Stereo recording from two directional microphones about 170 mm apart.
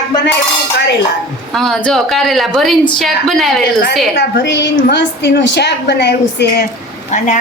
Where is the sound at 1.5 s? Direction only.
Centre (ahead or behind).